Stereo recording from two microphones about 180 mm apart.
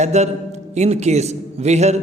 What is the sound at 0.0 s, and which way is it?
A man's voice, 40° right (ahead or behind).